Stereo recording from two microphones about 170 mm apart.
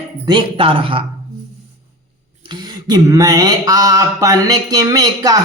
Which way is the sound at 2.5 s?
25° right (ahead or behind).